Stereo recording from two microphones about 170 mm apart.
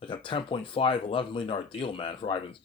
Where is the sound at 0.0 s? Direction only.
30° left (ahead or behind).